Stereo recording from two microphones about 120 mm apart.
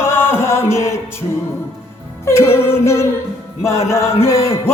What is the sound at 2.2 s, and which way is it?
Music, 20° left (ahead or behind).